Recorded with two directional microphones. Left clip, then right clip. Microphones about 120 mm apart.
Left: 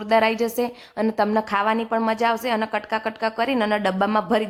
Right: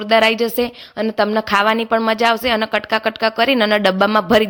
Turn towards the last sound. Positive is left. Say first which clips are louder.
# right 7 dB
turn(degrees=-35)  # may be behind; listen again after turning